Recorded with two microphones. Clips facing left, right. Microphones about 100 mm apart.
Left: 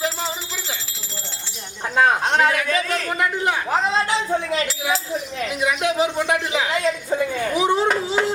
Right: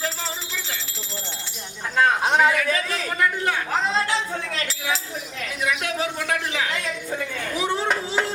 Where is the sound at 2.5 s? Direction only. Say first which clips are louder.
Left 2 dB; 15° left (ahead or behind).